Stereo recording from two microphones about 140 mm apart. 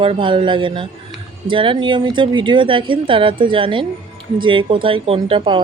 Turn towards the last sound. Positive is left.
turn(degrees=-35)  # may be behind; listen again after turning